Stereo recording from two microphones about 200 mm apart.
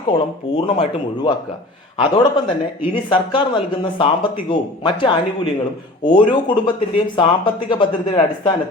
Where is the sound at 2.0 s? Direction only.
20° left (ahead or behind).